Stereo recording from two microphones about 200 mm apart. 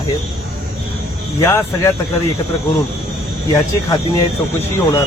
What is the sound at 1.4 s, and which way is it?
Speech, 15° left (ahead or behind).